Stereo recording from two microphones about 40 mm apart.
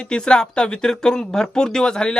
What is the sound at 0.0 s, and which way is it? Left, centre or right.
Speech, left.